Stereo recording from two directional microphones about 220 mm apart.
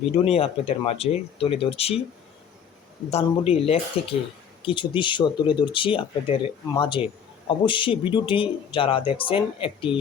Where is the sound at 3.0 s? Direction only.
30° left (ahead or behind).